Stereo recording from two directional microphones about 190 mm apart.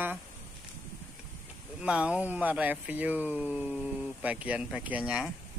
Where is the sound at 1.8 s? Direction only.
5° right (ahead or behind).